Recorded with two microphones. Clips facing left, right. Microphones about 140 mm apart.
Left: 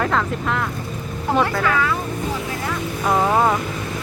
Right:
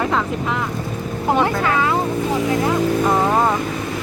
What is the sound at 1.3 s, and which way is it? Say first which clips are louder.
Speech: right 1 dB; 20° right (ahead or behind).